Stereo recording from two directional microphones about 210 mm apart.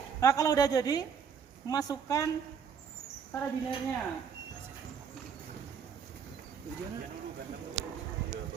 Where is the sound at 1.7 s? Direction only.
15° left (ahead or behind).